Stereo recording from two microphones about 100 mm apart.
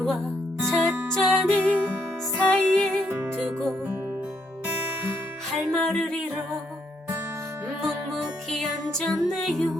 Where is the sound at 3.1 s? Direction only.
25° right (ahead or behind).